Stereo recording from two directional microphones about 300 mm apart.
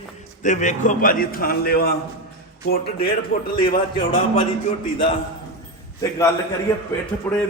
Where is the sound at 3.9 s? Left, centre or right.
Centre.